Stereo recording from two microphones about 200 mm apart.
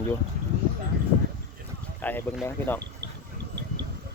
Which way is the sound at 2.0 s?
10° left (ahead or behind).